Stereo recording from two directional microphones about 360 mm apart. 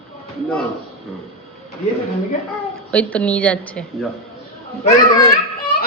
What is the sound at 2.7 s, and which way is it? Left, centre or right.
A woman's voice, centre.